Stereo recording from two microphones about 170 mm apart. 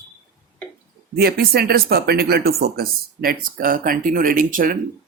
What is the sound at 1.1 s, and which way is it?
Speech, 65° right (ahead or behind).